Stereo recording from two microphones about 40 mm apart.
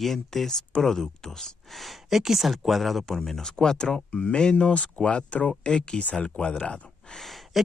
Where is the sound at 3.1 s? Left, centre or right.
Centre.